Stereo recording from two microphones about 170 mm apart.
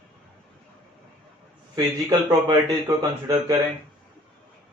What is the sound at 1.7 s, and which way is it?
A man's voice, 25° right (ahead or behind).